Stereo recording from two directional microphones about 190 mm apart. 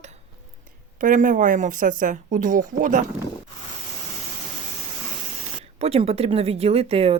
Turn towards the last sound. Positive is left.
turn(degrees=-30)  # may be behind; listen again after turning